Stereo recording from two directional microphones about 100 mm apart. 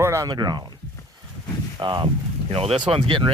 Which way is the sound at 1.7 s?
50° right (ahead or behind).